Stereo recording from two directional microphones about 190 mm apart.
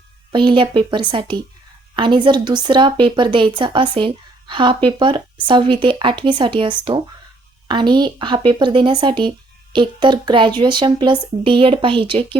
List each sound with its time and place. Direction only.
0.3 s speech: 25° right (ahead or behind)